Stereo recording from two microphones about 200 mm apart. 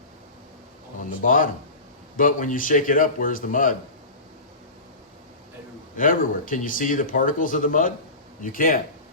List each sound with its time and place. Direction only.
1.2 s speech: 40° left (ahead or behind)
6.0 s speech: 45° left (ahead or behind)